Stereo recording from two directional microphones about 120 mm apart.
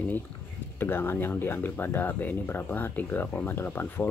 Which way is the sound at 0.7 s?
20° left (ahead or behind).